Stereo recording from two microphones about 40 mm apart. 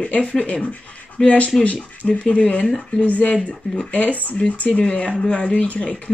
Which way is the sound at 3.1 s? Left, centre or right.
Left.